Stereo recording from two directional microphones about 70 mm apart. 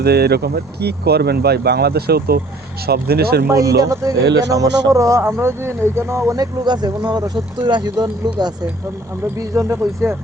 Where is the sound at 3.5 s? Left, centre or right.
Right.